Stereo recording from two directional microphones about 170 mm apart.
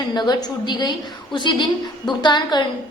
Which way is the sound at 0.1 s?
25° left (ahead or behind).